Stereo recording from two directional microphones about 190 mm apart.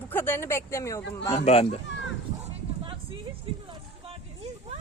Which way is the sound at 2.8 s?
25° right (ahead or behind).